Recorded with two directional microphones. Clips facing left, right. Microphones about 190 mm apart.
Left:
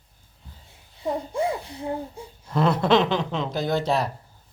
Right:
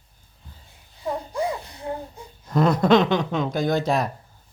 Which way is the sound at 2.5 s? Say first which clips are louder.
Right 3 dB; 40° right (ahead or behind).